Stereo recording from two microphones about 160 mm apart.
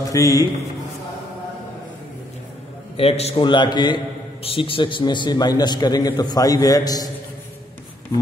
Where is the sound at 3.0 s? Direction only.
40° left (ahead or behind); by 7.0 s 25° left (ahead or behind).